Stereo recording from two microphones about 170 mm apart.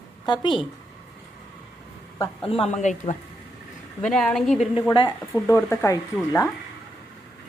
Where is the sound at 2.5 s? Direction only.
35° left (ahead or behind).